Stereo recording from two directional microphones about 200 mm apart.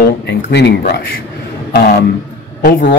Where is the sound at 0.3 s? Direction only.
60° left (ahead or behind).